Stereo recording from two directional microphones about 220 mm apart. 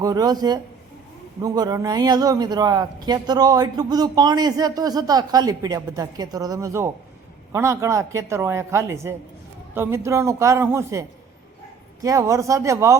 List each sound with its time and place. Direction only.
0.0 s a man's voice: 15° right (ahead or behind)
12.0 s a man's voice: 15° right (ahead or behind)